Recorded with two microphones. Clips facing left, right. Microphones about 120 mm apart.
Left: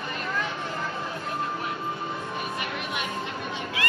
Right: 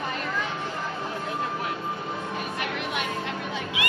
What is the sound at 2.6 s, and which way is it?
Music, 70° right (ahead or behind).